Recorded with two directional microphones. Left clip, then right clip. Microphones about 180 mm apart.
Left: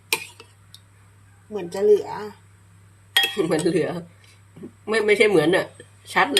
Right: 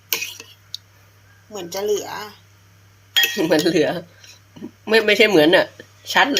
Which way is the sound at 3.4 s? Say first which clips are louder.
Right 4 dB; 40° right (ahead or behind).